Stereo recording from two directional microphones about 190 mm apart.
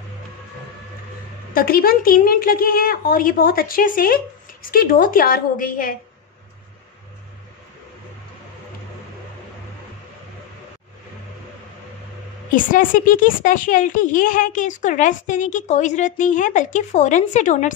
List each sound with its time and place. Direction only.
1.5 s a woman's voice: 50° left (ahead or behind)
12.4 s a woman's voice: 45° left (ahead or behind)